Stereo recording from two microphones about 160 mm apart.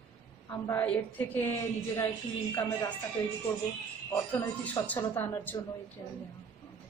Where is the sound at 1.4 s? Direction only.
20° left (ahead or behind).